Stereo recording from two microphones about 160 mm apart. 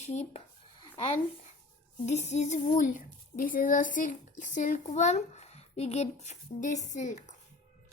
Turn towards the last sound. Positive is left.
turn(degrees=50)  # may be behind; listen again after turning